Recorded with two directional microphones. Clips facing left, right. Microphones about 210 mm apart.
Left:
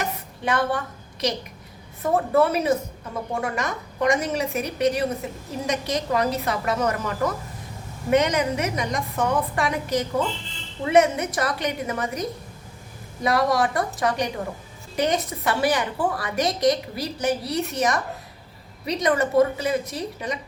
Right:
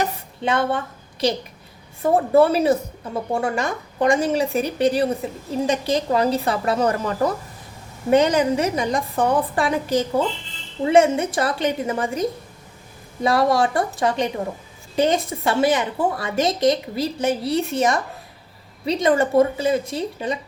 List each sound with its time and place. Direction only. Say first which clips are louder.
0.0 s a sound: right 4 dB; 25° right (ahead or behind)
1.2 s a woman's voice: right 4 dB; 30° right (ahead or behind)
13.2 s a woman's voice: right 3 dB; 30° right (ahead or behind)